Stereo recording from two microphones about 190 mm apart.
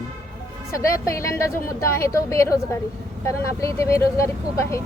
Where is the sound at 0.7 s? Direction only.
15° left (ahead or behind).